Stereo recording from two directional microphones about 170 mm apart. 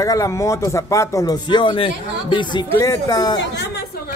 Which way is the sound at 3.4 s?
90° left.